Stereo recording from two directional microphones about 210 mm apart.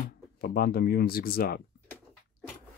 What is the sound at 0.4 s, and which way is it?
Speech, 45° left (ahead or behind).